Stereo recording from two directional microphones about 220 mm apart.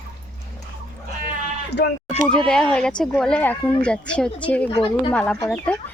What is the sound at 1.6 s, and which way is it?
Speech, 50° left (ahead or behind).